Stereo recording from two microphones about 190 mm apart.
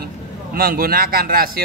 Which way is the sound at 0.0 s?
50° right (ahead or behind).